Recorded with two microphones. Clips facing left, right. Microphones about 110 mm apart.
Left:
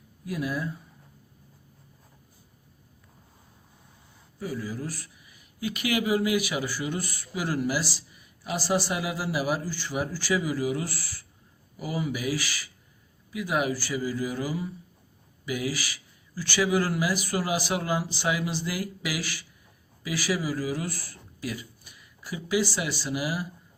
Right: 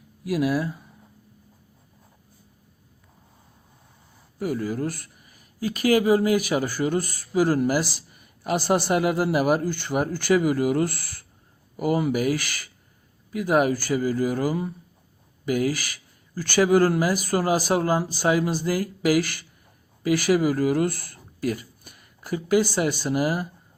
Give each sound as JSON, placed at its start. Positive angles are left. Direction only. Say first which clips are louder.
{"t": 0.3, "sound": "speech", "louder": "right 7 dB", "side_deg": -75}
{"t": 4.4, "sound": "speech", "louder": "right 7 dB", "side_deg": -65}